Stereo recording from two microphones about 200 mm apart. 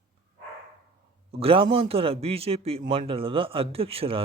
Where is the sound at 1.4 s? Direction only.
30° right (ahead or behind).